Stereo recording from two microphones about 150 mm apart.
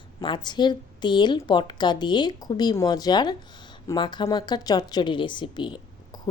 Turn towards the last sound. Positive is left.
turn(degrees=30)  # may be behind; listen again after turning